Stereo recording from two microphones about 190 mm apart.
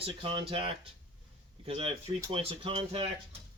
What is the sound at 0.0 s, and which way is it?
Speech, 30° right (ahead or behind).